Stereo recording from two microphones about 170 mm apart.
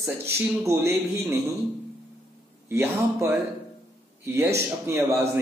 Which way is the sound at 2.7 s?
15° right (ahead or behind).